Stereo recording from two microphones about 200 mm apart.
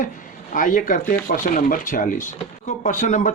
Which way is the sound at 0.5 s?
40° left (ahead or behind).